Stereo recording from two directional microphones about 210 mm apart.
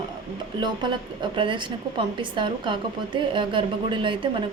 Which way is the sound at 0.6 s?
20° right (ahead or behind).